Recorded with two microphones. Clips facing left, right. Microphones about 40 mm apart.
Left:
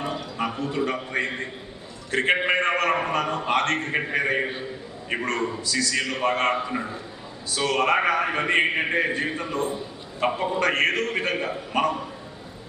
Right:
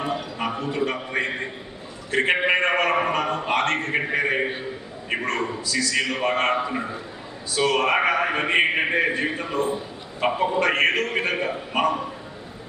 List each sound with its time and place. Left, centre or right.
0.0 s a sound: centre
0.5 s a man's voice: right
0.8 s a man's voice: centre